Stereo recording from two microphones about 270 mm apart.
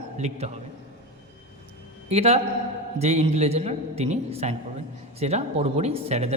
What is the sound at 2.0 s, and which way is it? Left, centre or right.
A man's voice, right.